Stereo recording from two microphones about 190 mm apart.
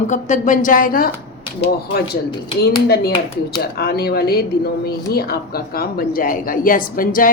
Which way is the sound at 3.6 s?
55° left (ahead or behind).